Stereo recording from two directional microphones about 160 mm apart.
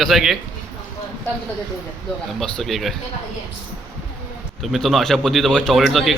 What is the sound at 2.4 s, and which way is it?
Speech, centre (ahead or behind).